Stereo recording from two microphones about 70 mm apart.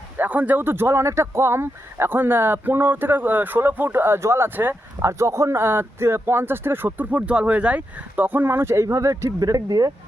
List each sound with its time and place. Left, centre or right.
0.2 s speech: right